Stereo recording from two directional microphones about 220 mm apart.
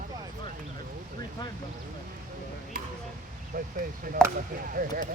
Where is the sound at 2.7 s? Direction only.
40° right (ahead or behind).